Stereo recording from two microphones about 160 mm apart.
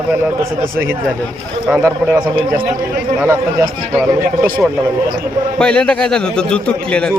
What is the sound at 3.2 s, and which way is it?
Speech, 15° right (ahead or behind).